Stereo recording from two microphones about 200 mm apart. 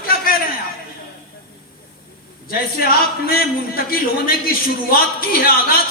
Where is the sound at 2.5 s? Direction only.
50° left (ahead or behind).